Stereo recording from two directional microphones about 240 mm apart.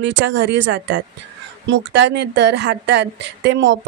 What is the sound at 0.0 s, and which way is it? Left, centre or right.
A woman's voice, right.